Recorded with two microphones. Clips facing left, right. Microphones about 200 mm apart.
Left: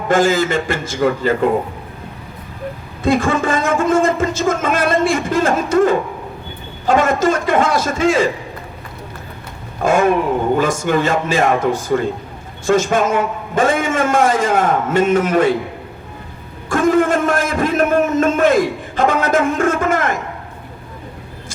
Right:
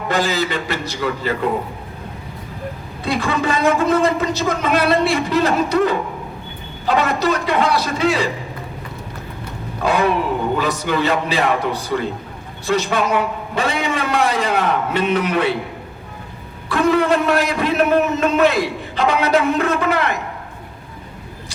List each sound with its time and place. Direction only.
0.1 s a man's voice: 50° left (ahead or behind)
3.0 s a man's voice: 50° left (ahead or behind)
9.8 s a man's voice: 50° left (ahead or behind)
16.6 s a man's voice: 45° left (ahead or behind)